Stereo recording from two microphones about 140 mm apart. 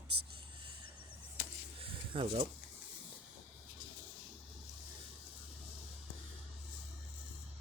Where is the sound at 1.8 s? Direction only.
40° right (ahead or behind).